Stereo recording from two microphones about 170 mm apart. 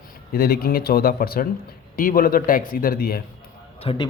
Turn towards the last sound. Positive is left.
turn(degrees=25)  # may be behind; listen again after turning